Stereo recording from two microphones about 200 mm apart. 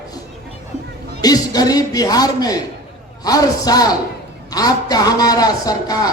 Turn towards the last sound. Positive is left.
turn(degrees=20)  # may be behind; listen again after turning